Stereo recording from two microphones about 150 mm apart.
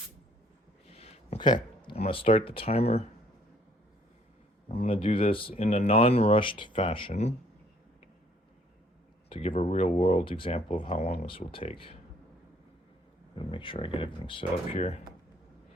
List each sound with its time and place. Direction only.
0.9 s a sound: 45° left (ahead or behind)
1.4 s speech: 30° left (ahead or behind)
4.7 s speech: 40° left (ahead or behind)
9.3 s speech: 40° left (ahead or behind)
13.3 s speech: 35° left (ahead or behind)